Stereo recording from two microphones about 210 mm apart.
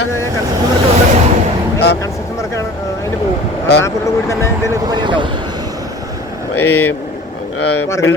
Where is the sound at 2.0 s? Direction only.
15° left (ahead or behind).